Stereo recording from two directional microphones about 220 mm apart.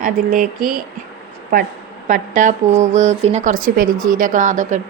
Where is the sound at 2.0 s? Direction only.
35° right (ahead or behind).